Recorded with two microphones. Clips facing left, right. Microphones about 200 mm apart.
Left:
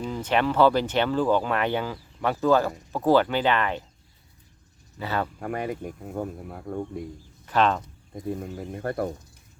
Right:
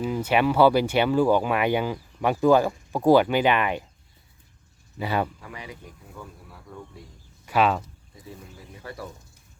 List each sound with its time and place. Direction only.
0.0 s speech: 10° right (ahead or behind)
4.9 s speech: 15° right (ahead or behind)
5.4 s speech: 55° left (ahead or behind)
7.4 s speech: 10° right (ahead or behind)
8.1 s speech: 55° left (ahead or behind)